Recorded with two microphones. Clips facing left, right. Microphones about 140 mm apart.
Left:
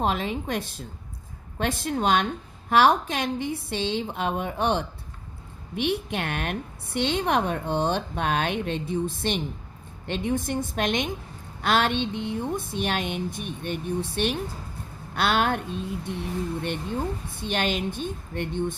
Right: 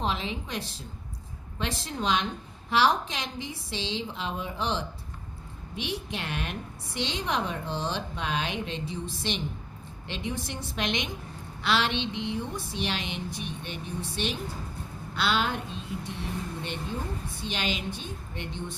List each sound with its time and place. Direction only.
0.0 s a woman's voice: 50° left (ahead or behind)
17.3 s speech: 55° left (ahead or behind)